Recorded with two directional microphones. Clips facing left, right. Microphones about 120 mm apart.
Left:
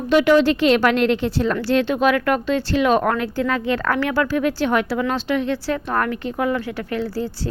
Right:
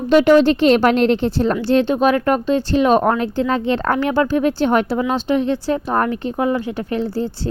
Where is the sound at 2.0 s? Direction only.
35° right (ahead or behind).